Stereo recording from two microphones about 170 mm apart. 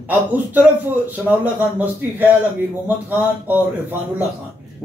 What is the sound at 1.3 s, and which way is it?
Speech, 10° right (ahead or behind).